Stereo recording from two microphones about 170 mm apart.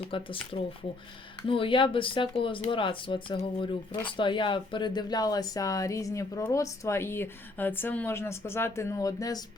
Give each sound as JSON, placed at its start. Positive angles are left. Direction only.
{"t": 0.1, "sound": "speech", "side_deg": 30}
{"t": 1.5, "sound": "speech", "side_deg": 30}